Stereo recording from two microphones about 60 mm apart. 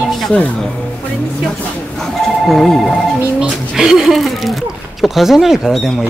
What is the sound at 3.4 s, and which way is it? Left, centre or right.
Speech, centre.